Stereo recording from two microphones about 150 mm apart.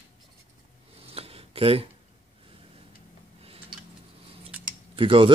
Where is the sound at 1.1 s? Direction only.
40° right (ahead or behind).